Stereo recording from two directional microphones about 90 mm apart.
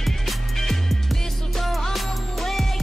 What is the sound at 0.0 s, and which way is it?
Music, centre (ahead or behind).